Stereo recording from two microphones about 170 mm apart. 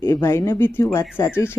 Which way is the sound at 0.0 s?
15° left (ahead or behind).